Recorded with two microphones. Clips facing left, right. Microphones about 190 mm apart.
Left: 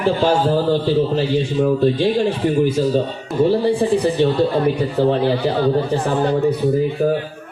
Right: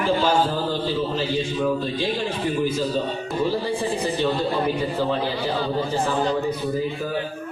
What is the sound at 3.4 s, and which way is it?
A man's voice, 65° left (ahead or behind).